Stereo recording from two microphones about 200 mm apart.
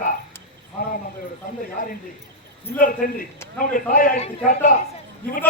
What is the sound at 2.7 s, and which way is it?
A man's voice, 45° left (ahead or behind).